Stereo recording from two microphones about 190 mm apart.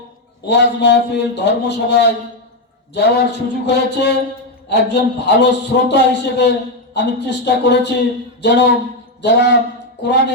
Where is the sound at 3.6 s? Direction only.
65° left (ahead or behind).